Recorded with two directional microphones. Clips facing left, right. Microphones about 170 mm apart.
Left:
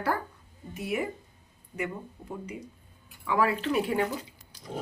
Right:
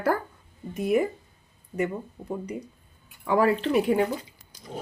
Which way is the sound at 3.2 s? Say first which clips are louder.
Right 5 dB; 40° right (ahead or behind).